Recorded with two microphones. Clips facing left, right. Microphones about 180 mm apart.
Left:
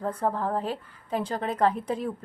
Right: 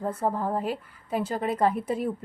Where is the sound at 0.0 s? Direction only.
10° right (ahead or behind).